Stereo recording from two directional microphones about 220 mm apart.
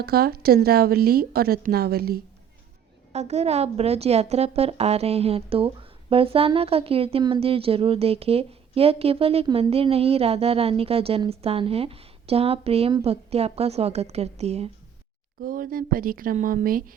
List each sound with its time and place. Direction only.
0.0 s a woman's voice: 45° right (ahead or behind)
3.1 s a woman's voice: 30° right (ahead or behind)
15.4 s a woman's voice: 40° right (ahead or behind)